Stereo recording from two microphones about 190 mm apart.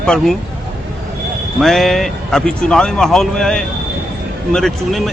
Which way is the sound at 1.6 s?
Centre (ahead or behind).